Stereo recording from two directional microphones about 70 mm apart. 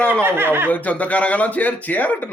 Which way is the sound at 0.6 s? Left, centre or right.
Left.